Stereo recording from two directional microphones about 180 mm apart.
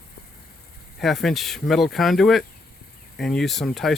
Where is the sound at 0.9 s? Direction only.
Centre (ahead or behind).